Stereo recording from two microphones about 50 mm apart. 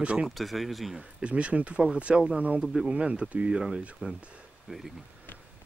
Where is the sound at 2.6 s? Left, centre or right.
Centre.